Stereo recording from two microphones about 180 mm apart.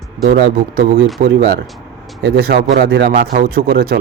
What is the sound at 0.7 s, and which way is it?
Speech, 55° right (ahead or behind).